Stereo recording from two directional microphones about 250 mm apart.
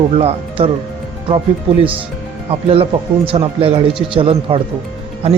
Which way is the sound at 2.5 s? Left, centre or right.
Right.